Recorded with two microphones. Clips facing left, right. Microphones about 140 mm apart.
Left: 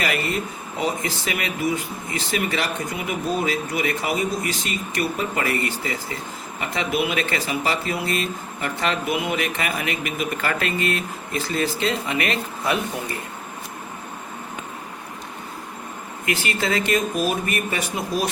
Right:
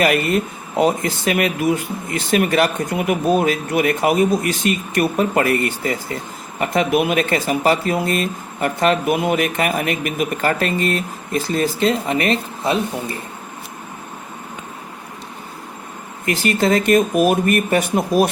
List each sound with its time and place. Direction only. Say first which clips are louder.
0.0 s speech: right 8 dB; 50° right (ahead or behind); by 12.8 s 30° right (ahead or behind)
16.2 s speech: right 7 dB; 40° right (ahead or behind)